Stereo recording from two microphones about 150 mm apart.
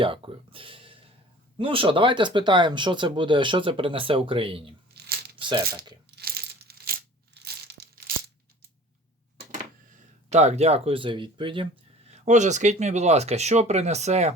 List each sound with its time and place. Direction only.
0.0 s speech: 35° right (ahead or behind)
4.9 s tearing: 90° right
5.4 s speech: 30° right (ahead or behind)
6.1 s a sound: 90° right
7.3 s crushing: 90° right
10.2 s speech: 50° right (ahead or behind)